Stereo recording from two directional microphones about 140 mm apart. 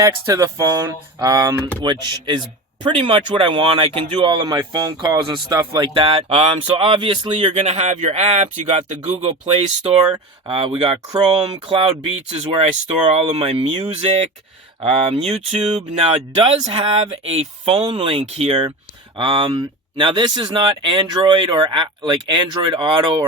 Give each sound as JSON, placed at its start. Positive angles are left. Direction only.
{"t": 0.0, "sound": "speech", "side_deg": -20}
{"t": 7.4, "sound": "speech", "side_deg": -45}